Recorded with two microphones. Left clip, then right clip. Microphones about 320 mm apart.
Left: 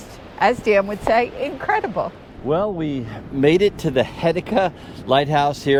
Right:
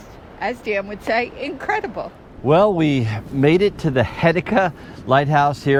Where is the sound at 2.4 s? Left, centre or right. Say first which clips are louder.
Right 6 dB; right.